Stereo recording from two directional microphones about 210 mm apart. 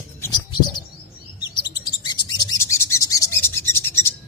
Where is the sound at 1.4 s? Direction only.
20° left (ahead or behind).